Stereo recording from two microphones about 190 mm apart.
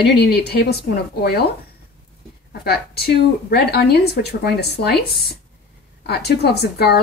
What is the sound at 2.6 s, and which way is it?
A woman's voice, 55° left (ahead or behind).